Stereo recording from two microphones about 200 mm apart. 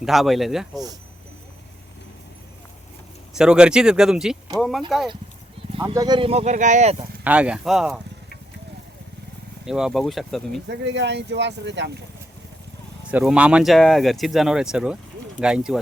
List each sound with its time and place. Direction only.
0.0 s speech: centre (ahead or behind)
3.3 s speech: 5° right (ahead or behind)
5.8 s speech: 15° right (ahead or behind); by 6.9 s 35° right (ahead or behind)
7.3 s speech: 5° right (ahead or behind)
9.6 s speech: 5° right (ahead or behind)
10.7 s speech: 60° right (ahead or behind)
13.1 s speech: 5° right (ahead or behind)